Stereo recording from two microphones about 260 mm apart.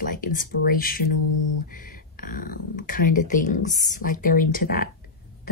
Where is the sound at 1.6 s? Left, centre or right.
Left.